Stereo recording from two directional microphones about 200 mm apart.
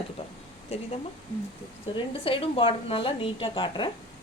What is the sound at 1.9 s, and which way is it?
A woman's voice, 25° left (ahead or behind).